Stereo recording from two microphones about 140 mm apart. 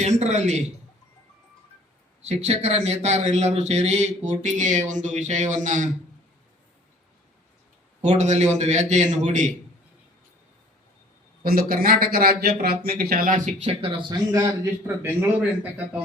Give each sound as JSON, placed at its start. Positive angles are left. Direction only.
{"t": 0.0, "sound": "a man's voice", "side_deg": -55}
{"t": 2.2, "sound": "a man's voice", "side_deg": -50}
{"t": 8.0, "sound": "a man's voice", "side_deg": -55}
{"t": 11.4, "sound": "speech", "side_deg": -90}
{"t": 14.1, "sound": "a man's voice", "side_deg": -25}